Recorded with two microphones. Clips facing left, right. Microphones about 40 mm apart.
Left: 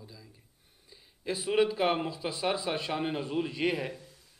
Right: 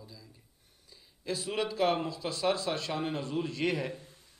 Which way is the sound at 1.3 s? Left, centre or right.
Left.